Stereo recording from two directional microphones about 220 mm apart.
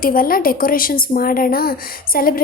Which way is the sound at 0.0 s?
40° left (ahead or behind).